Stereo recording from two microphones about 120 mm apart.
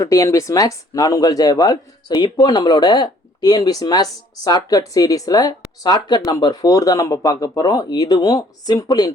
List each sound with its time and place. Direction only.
0.0 s speech: 25° left (ahead or behind)